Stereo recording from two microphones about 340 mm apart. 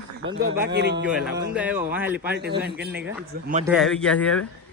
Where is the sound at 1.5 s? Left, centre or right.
Centre.